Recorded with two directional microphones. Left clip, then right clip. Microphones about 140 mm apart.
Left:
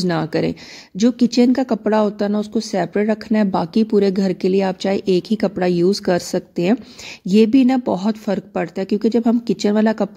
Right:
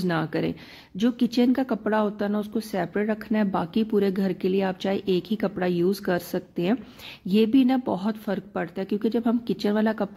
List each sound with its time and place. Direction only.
0.0 s speech: 45° left (ahead or behind)